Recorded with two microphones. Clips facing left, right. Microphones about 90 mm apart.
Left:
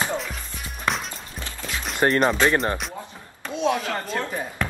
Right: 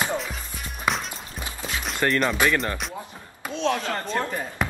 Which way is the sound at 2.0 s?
35° left (ahead or behind).